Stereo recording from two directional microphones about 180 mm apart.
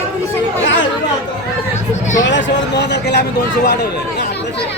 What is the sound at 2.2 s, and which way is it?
Speech, 85° left.